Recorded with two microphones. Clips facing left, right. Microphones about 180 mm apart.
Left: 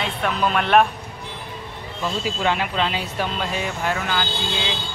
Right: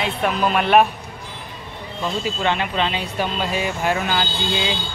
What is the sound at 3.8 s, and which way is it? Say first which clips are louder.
Speech: right 3 dB; 20° right (ahead or behind).